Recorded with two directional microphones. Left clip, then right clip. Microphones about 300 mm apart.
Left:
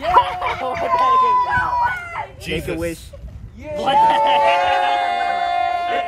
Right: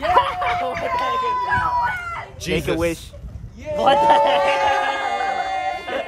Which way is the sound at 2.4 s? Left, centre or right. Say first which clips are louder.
Right 5 dB; right.